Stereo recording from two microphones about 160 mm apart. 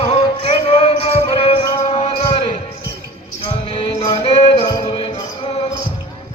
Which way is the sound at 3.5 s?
35° left (ahead or behind).